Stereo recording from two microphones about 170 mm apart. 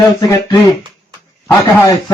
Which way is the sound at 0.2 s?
20° left (ahead or behind).